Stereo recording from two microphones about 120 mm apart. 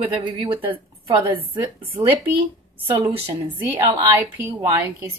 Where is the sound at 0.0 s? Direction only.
40° right (ahead or behind).